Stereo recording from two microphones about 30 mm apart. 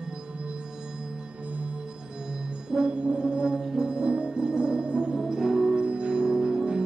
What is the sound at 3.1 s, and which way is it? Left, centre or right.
Music, right.